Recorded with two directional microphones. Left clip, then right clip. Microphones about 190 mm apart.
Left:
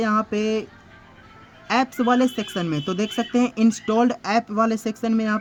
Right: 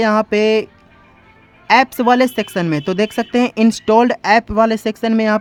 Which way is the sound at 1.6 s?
30° right (ahead or behind).